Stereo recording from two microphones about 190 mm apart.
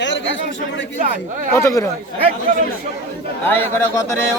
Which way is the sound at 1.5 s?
15° left (ahead or behind).